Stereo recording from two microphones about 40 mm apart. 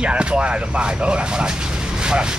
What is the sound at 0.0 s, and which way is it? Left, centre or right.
Speech, right.